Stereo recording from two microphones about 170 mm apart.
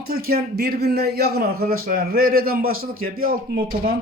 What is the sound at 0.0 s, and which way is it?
Speech, 60° right (ahead or behind).